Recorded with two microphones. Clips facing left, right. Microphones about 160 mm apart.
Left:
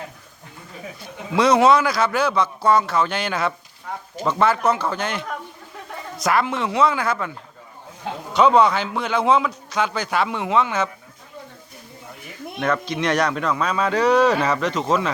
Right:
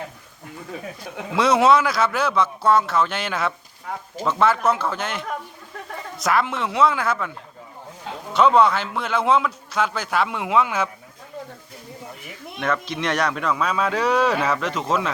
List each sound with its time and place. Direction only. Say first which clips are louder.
1.4 s a man's voice: left 1 dB; centre (ahead or behind)
12.5 s a man's voice: left 2 dB; centre (ahead or behind)